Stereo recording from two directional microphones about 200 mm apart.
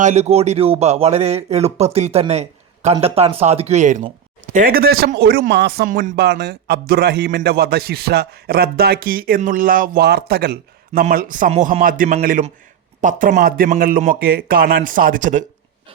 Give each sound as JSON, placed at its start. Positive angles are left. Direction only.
{"t": 0.0, "sound": "a man's voice", "side_deg": -35}